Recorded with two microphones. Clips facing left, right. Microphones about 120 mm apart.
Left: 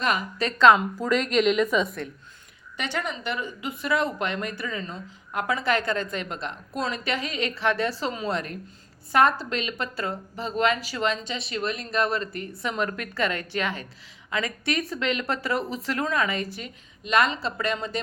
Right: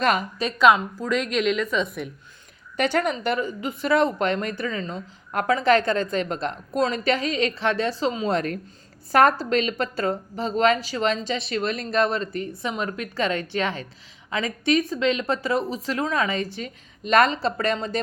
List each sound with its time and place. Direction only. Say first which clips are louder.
0.9 s speech: left 1 dB; 5° left (ahead or behind)
2.7 s speech: right 8 dB; 45° right (ahead or behind); by 8.3 s 20° right (ahead or behind)
8.3 s speech: right 5 dB; 40° right (ahead or behind)
16.6 s speech: right 5 dB; 40° right (ahead or behind)